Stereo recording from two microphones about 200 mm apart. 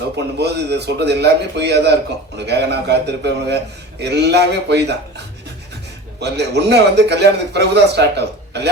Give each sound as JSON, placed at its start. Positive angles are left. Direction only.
{"t": 0.3, "sound": "a man's voice", "side_deg": -55}